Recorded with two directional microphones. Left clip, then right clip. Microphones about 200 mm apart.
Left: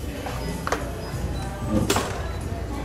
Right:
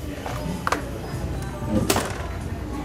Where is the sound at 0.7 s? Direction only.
40° right (ahead or behind).